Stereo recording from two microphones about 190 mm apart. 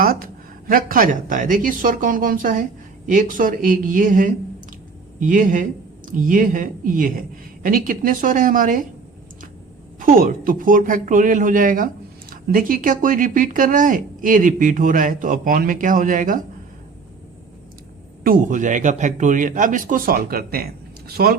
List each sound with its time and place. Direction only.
0.0 s a woman's voice: 50° right (ahead or behind)
10.1 s speech: 50° right (ahead or behind)
18.2 s speech: 45° right (ahead or behind)